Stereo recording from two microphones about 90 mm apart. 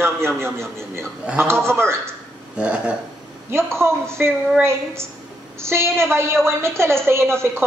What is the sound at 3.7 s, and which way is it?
A man's voice, 30° right (ahead or behind).